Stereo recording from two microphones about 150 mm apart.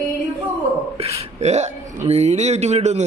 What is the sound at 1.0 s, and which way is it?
A man's voice, 40° right (ahead or behind).